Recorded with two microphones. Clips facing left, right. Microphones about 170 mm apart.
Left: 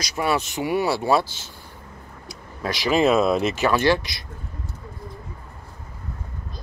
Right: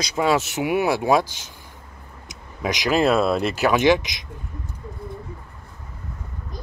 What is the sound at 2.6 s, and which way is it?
Speech, 15° right (ahead or behind).